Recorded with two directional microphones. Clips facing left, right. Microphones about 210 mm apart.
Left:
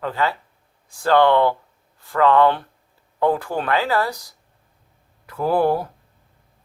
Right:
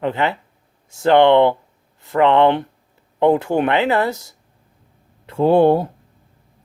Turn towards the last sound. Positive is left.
turn(degrees=-25)  # may be behind; listen again after turning